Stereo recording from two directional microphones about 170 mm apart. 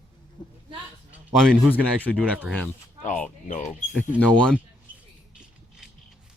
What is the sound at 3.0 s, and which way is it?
Speech, 45° left (ahead or behind).